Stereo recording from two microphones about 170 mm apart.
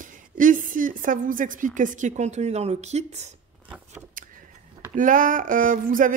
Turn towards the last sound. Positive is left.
turn(degrees=-50)  # may be behind; listen again after turning